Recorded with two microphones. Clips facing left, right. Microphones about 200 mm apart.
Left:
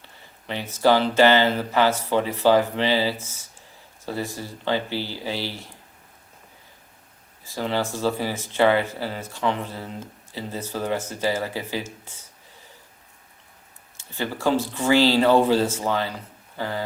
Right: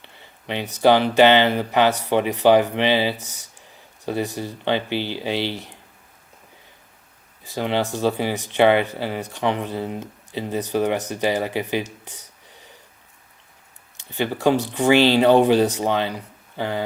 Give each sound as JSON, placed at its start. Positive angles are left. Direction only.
{"t": 0.0, "sound": "speech", "side_deg": -20}
{"t": 7.4, "sound": "speech", "side_deg": -20}
{"t": 13.9, "sound": "speech", "side_deg": -20}